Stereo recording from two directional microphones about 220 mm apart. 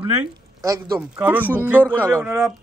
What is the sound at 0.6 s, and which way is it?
A woman's voice, 15° right (ahead or behind).